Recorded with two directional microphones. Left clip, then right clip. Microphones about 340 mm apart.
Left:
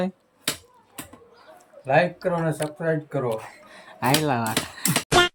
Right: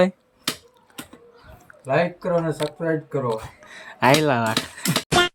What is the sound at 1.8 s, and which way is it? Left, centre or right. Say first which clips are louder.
Speech: left 1 dB; centre.